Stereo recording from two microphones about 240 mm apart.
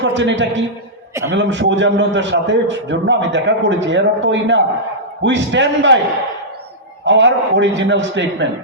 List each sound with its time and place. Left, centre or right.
0.0 s a man's voice: right
7.0 s a man's voice: right